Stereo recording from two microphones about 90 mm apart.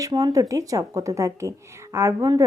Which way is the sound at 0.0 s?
50° right (ahead or behind).